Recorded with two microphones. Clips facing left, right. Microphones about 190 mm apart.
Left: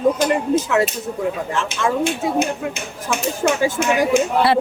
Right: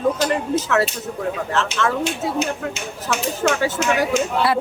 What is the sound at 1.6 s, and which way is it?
Speech, 15° left (ahead or behind).